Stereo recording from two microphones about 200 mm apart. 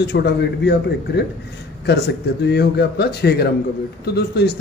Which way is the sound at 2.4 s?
55° left (ahead or behind).